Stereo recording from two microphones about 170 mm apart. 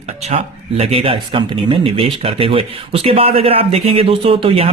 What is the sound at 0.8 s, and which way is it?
Speech, 35° right (ahead or behind).